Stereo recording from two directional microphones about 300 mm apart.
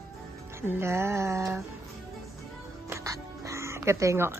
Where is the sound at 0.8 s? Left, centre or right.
Centre.